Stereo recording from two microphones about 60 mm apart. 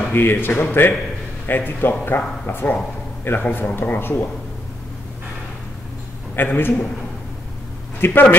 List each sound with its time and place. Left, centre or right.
0.1 s speech: left
6.3 s speech: left
8.0 s speech: left